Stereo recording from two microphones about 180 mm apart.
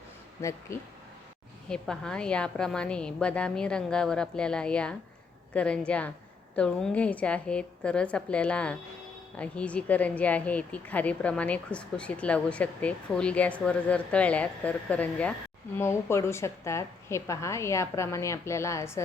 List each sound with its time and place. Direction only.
0.7 s speech: 15° left (ahead or behind)
1.7 s a woman's voice: 5° left (ahead or behind)